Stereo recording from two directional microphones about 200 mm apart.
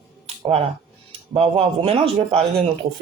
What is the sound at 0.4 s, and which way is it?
Speech, 30° right (ahead or behind).